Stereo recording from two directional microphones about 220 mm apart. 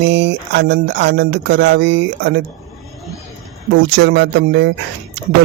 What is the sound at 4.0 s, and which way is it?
Speech, 55° right (ahead or behind).